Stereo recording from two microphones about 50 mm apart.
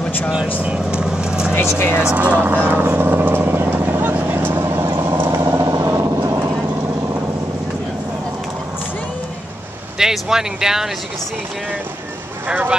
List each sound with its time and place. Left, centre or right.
0.6 s speech: right
1.0 s vehicle: centre
1.5 s speech: left
2.1 s speech: right
2.4 s vehicle: right
5.4 s vehicle: right
9.9 s speech: centre